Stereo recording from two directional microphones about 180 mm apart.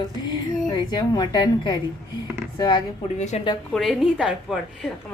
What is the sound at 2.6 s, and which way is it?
Speech, 25° left (ahead or behind).